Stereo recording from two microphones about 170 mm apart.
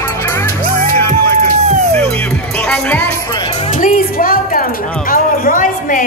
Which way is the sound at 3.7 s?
50° left (ahead or behind).